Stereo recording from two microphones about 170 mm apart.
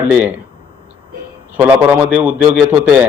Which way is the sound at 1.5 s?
10° right (ahead or behind).